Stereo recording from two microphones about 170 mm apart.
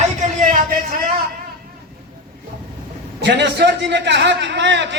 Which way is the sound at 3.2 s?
90° right.